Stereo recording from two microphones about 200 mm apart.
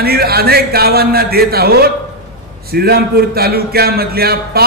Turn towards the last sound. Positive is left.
turn(degrees=-50)  # may be behind; listen again after turning